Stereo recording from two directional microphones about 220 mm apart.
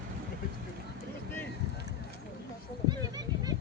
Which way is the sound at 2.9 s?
15° right (ahead or behind).